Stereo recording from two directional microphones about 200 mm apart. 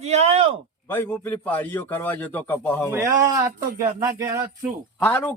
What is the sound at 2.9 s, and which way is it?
Speech, 15° right (ahead or behind).